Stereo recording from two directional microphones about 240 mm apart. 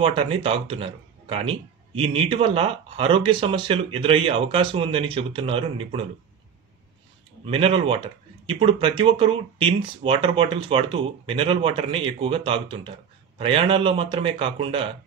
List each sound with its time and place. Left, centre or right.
0.0 s speech: right
7.4 s speech: right